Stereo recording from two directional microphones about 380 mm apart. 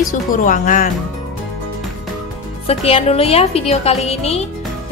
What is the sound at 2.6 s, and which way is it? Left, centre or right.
A woman's voice, centre.